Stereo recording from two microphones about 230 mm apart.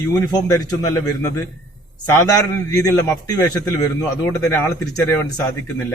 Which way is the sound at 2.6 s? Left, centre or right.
Centre.